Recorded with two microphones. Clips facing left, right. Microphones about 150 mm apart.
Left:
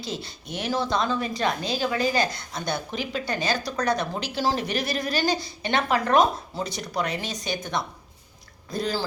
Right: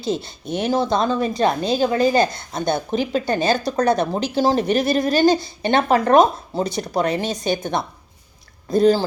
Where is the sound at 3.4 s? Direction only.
25° right (ahead or behind).